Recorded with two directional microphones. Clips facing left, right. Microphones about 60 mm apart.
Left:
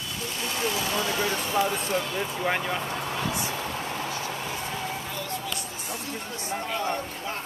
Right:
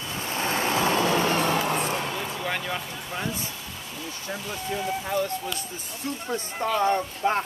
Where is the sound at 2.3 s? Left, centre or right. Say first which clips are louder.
Left 2 dB; centre.